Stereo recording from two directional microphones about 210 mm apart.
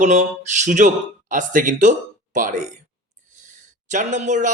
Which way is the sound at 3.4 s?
35° right (ahead or behind).